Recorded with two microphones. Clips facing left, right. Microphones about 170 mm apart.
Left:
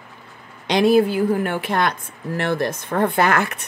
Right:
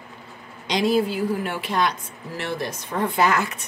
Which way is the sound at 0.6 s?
60° left (ahead or behind).